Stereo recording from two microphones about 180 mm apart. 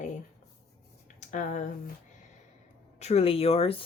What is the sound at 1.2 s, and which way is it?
Speech, 45° left (ahead or behind).